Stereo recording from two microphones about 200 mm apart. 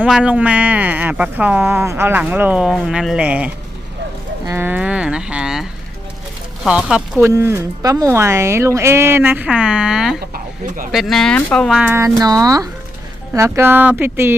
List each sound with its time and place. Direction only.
0.0 s speech: 5° right (ahead or behind)
4.4 s a sound: 10° right (ahead or behind)
6.7 s speech: 5° right (ahead or behind)
10.2 s speech: 45° right (ahead or behind)
10.9 s speech: centre (ahead or behind)